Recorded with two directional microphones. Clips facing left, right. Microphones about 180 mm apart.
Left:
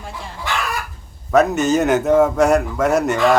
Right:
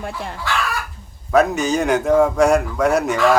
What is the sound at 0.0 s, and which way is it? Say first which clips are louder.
Speech: right 5 dB; 60° right (ahead or behind).